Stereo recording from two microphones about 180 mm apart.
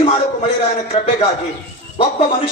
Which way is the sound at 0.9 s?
30° left (ahead or behind).